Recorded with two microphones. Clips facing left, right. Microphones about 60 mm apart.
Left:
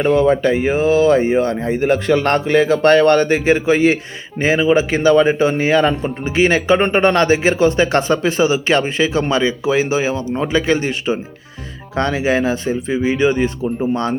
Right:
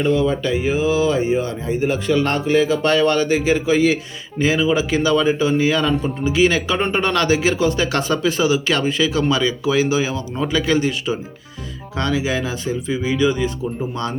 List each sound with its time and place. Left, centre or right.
0.0 s speech: left